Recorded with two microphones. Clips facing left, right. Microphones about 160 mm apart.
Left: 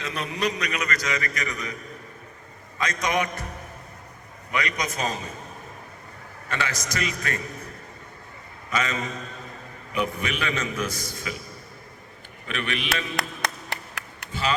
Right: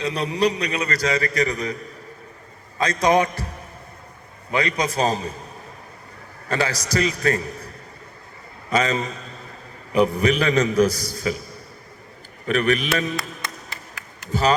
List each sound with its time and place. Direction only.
0.0 s a man's voice: 35° right (ahead or behind)
2.7 s a man's voice: 35° right (ahead or behind)
4.5 s a man's voice: 30° right (ahead or behind)
6.5 s a man's voice: 35° right (ahead or behind)
8.7 s a man's voice: 35° right (ahead or behind)
12.5 s a man's voice: 40° right (ahead or behind)
13.1 s music: 70° left (ahead or behind)